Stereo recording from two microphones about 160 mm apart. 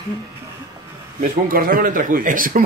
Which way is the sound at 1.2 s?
60° right (ahead or behind).